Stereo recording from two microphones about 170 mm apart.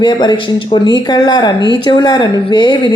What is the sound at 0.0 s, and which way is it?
Speech, 25° left (ahead or behind).